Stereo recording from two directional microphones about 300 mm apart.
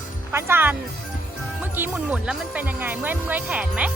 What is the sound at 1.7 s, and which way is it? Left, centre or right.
Speech, centre.